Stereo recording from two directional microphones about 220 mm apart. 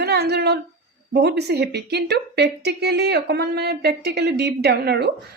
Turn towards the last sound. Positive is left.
turn(degrees=-50)  # may be behind; listen again after turning